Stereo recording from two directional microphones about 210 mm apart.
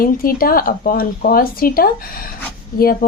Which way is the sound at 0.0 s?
45° left (ahead or behind).